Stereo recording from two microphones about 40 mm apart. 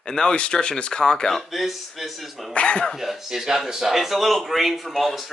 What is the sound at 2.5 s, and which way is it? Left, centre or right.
Speech, left.